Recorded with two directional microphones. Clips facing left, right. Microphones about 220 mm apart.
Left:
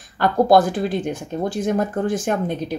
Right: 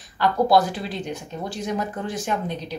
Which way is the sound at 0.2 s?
50° left (ahead or behind).